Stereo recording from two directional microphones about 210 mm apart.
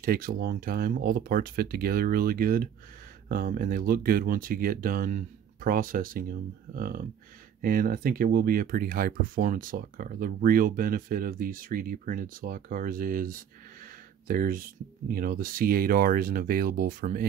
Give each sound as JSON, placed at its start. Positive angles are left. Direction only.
{"t": 0.0, "sound": "speech", "side_deg": -45}